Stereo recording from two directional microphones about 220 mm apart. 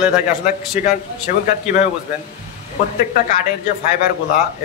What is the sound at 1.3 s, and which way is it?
Speech, 35° left (ahead or behind).